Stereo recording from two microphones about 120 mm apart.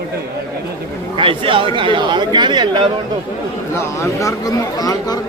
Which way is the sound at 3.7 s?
25° left (ahead or behind).